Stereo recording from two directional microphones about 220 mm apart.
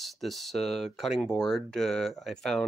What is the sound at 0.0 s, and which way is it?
Speech, centre (ahead or behind).